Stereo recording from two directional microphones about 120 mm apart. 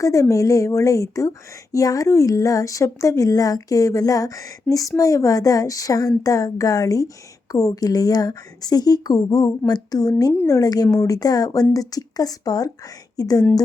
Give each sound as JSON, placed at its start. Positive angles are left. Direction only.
{"t": 0.0, "sound": "speech", "side_deg": 25}